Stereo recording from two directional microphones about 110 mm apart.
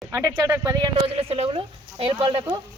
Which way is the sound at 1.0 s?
65° right (ahead or behind).